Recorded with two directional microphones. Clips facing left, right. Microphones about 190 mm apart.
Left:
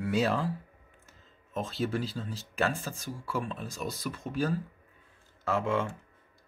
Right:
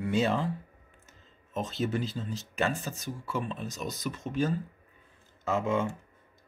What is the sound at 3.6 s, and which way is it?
Speech, 30° left (ahead or behind).